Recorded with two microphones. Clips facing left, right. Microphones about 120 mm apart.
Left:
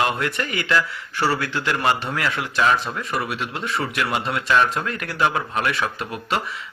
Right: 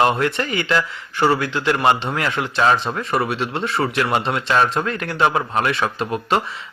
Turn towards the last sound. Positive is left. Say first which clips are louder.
# right 5 dB
turn(degrees=-30)  # may be behind; listen again after turning